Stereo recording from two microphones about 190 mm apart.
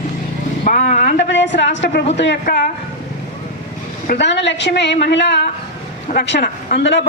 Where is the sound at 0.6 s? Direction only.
40° left (ahead or behind).